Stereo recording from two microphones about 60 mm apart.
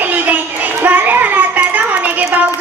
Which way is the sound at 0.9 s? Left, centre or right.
Right.